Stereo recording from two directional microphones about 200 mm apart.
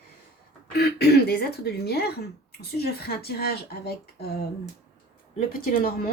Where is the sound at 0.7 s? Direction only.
55° left (ahead or behind).